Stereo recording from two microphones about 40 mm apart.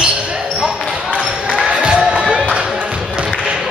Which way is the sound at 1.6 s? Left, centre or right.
Centre.